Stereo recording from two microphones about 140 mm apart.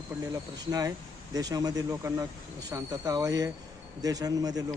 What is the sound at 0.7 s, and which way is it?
Speech, 25° right (ahead or behind).